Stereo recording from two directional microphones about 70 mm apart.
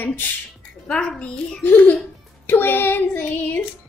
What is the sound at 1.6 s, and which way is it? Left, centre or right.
Speech, left.